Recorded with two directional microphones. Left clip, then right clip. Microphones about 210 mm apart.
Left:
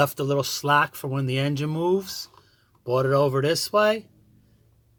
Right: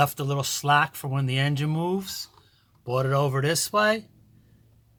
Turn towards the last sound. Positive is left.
turn(degrees=10)  # may be behind; listen again after turning